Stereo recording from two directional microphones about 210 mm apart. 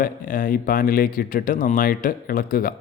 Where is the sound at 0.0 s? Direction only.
40° left (ahead or behind).